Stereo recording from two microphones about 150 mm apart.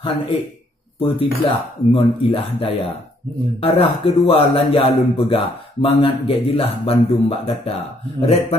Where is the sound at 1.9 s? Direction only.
40° left (ahead or behind).